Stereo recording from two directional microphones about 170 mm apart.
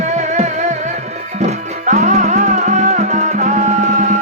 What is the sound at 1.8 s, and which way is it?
Music, 45° right (ahead or behind).